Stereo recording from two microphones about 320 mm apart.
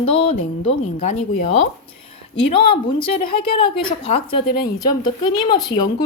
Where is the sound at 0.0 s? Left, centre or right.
Centre.